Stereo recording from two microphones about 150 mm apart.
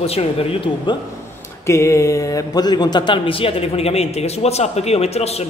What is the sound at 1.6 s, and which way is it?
A man's voice, 20° left (ahead or behind).